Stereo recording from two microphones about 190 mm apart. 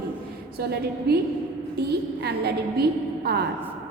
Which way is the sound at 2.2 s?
60° right (ahead or behind).